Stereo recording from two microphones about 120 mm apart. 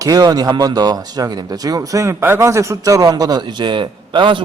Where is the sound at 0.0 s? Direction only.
30° right (ahead or behind).